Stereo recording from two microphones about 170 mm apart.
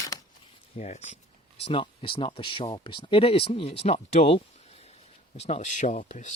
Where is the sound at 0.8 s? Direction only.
40° left (ahead or behind).